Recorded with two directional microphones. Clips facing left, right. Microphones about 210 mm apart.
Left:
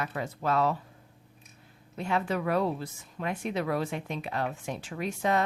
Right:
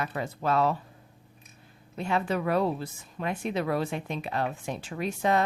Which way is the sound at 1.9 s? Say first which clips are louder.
Right 1 dB; 30° right (ahead or behind).